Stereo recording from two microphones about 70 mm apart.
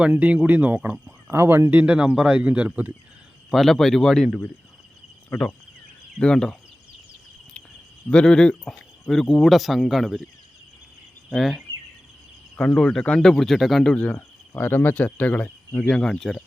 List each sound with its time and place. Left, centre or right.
0.1 s speech: right
1.3 s speech: right
1.8 s speech: centre
3.5 s speech: centre
6.1 s speech: centre
8.1 s speech: centre
11.3 s speech: centre
12.5 s speech: centre
13.9 s cricket: centre
14.6 s speech: left; by 16.4 s centre